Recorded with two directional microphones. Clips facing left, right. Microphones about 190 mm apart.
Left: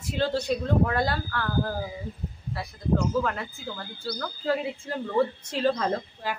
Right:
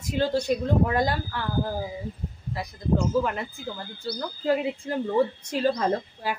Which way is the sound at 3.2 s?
15° right (ahead or behind).